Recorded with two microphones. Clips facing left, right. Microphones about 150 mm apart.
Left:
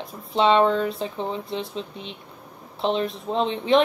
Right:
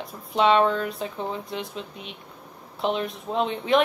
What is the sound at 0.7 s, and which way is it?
Speech, 30° left (ahead or behind).